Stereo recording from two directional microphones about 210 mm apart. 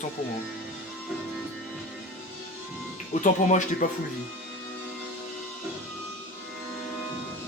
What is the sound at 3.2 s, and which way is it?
Speech, 35° left (ahead or behind).